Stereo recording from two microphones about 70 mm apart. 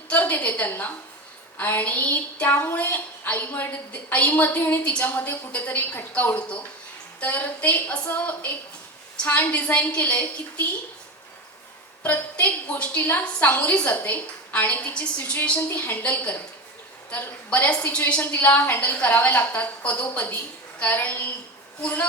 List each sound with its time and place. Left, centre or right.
0.1 s a woman's voice: left
5.0 s a woman's voice: left
12.0 s a woman's voice: left